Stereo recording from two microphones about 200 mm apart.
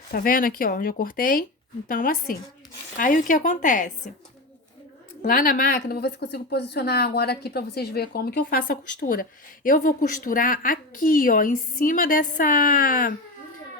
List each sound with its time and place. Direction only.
0.1 s a woman's voice: 45° left (ahead or behind)
5.2 s a woman's voice: 45° left (ahead or behind)